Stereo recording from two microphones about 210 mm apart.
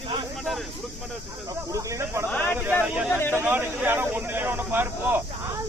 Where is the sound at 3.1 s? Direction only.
10° left (ahead or behind).